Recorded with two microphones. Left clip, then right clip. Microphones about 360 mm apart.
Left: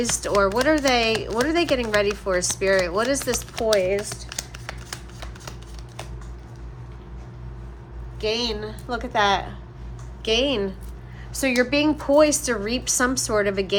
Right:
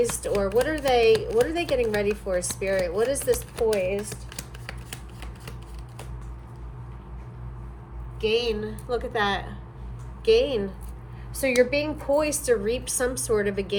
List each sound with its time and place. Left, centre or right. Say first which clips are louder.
0.0 s speech: left 4 dB; left
3.9 s computer keyboard: left 5 dB; centre
8.2 s a woman's voice: right 1 dB; centre